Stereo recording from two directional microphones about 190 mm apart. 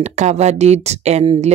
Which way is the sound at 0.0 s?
35° right (ahead or behind).